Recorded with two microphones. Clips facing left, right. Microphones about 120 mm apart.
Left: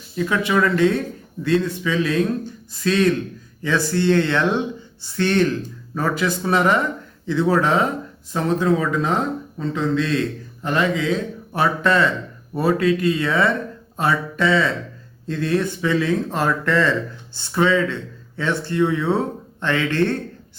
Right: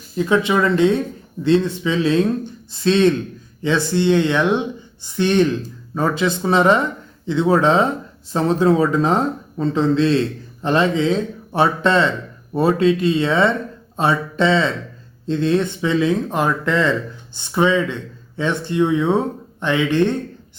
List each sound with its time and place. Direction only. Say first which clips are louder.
0.3 s speech: right 3 dB; 20° right (ahead or behind)